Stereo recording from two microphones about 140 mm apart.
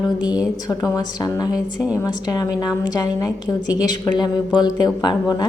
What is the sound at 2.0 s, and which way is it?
A woman's voice, 30° left (ahead or behind).